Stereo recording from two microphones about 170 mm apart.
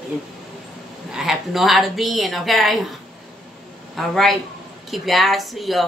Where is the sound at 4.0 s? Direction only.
Centre (ahead or behind).